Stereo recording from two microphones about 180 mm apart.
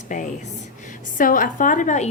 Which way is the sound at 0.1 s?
45° left (ahead or behind).